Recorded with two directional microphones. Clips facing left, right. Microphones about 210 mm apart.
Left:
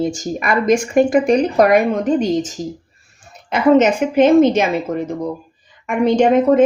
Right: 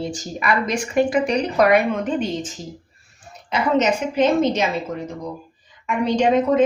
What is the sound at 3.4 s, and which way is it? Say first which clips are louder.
A woman's voice: left 7 dB; 55° left (ahead or behind).